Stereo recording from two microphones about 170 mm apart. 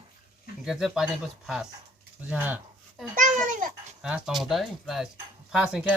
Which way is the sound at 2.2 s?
10° right (ahead or behind).